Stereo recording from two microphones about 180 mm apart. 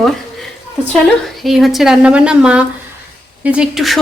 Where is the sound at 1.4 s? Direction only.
Centre (ahead or behind).